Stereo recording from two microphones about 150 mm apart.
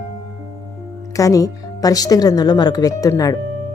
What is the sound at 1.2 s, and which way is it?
Speech, 20° left (ahead or behind).